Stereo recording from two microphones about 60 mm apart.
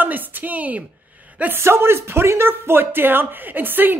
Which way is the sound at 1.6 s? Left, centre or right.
Right.